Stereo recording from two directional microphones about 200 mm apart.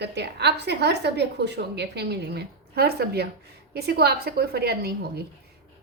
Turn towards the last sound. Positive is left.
turn(degrees=-50)  # may be behind; listen again after turning